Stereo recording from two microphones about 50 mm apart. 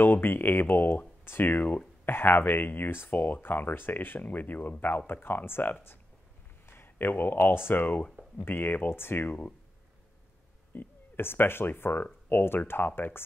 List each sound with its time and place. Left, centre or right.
0.0 s speech: left
1.4 s speech: left
2.0 s speech: left
10.7 s speech: left